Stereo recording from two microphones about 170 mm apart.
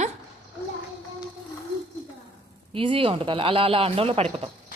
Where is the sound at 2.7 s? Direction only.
30° right (ahead or behind).